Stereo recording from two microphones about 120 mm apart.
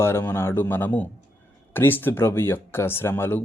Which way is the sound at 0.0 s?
20° left (ahead or behind).